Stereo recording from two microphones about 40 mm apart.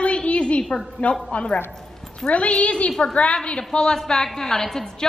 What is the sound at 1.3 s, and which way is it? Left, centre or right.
A woman's voice, left.